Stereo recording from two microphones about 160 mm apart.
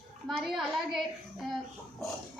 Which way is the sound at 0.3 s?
Centre (ahead or behind).